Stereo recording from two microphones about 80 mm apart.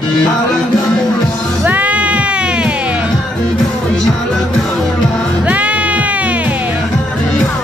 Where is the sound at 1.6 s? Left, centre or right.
Right.